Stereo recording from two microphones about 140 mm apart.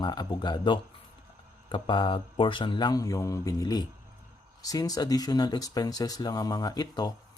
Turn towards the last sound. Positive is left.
turn(degrees=30)  # may be behind; listen again after turning